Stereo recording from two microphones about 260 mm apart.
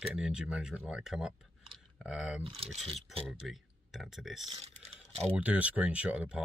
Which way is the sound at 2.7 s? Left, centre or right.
Right.